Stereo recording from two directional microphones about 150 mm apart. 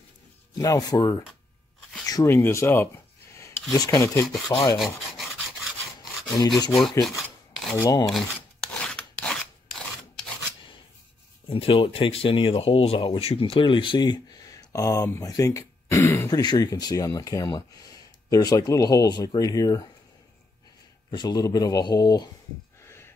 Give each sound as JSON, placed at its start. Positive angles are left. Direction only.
{"t": 0.6, "sound": "speech", "side_deg": 25}
{"t": 4.7, "sound": "rub", "side_deg": 0}
{"t": 6.3, "sound": "speech", "side_deg": 25}
{"t": 6.7, "sound": "filing", "side_deg": 0}
{"t": 7.8, "sound": "speech", "side_deg": 25}
{"t": 8.1, "sound": "filing", "side_deg": 5}
{"t": 11.4, "sound": "speech", "side_deg": 35}
{"t": 21.1, "sound": "speech", "side_deg": 30}
{"t": 22.8, "sound": "a sound", "side_deg": 15}